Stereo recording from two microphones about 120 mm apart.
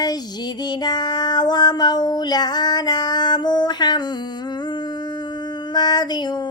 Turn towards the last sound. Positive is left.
turn(degrees=35)  # may be behind; listen again after turning